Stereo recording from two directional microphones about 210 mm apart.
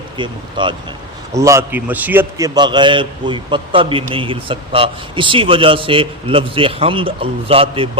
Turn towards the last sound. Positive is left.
turn(degrees=-25)  # may be behind; listen again after turning